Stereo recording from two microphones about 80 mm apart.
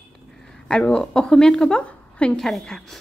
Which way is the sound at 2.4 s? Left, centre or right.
Centre.